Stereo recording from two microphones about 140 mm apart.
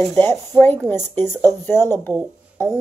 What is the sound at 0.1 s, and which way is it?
A woman's voice, 15° left (ahead or behind).